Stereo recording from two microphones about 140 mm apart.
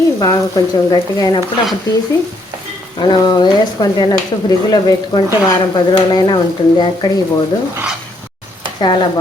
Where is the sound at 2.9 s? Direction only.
30° left (ahead or behind).